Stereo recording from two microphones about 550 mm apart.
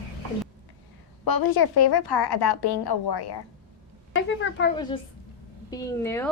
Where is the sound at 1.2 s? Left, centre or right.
Left.